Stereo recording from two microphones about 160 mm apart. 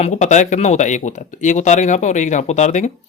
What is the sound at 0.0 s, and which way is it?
A man's voice, 50° left (ahead or behind).